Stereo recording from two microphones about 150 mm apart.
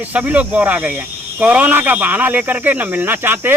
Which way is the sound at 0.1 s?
10° right (ahead or behind).